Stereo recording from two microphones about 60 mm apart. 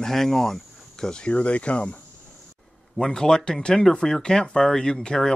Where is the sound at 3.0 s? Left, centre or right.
Centre.